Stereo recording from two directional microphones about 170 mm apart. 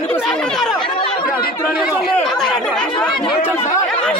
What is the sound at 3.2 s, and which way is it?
Speech, 30° left (ahead or behind).